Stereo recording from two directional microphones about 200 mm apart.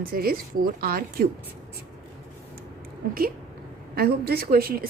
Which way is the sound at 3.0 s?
45° right (ahead or behind).